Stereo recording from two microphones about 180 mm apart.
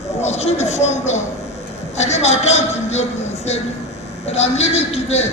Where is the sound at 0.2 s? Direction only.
40° left (ahead or behind).